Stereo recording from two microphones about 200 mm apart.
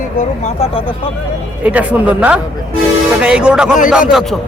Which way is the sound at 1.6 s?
5° right (ahead or behind).